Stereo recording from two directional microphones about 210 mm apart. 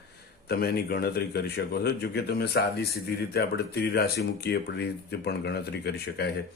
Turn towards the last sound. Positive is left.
turn(degrees=50)  # may be behind; listen again after turning